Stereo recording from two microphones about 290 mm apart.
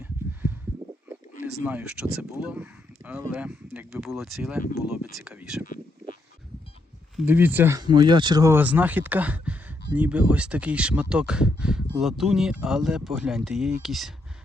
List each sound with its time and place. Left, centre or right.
1.6 s speech: centre
7.2 s speech: centre